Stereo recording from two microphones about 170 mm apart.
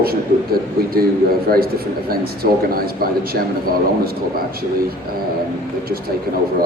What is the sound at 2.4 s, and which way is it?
Speech, 60° right (ahead or behind).